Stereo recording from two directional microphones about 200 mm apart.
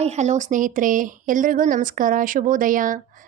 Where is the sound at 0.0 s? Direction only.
35° right (ahead or behind).